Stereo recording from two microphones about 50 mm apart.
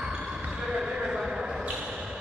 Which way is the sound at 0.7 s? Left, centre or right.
Centre.